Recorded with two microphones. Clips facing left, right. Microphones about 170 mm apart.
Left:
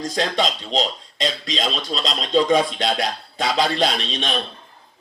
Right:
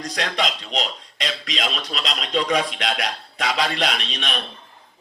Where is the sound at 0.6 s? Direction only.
25° left (ahead or behind).